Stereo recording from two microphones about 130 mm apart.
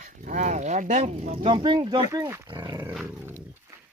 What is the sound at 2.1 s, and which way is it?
Speech, 25° right (ahead or behind).